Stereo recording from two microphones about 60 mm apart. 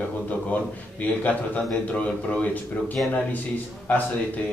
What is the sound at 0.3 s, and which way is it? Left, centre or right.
A man's voice, left.